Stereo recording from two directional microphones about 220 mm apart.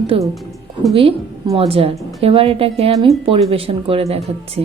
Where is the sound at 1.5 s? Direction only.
25° right (ahead or behind).